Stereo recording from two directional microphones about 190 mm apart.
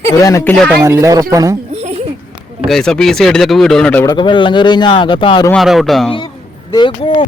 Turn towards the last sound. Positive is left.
turn(degrees=25)  # may be behind; listen again after turning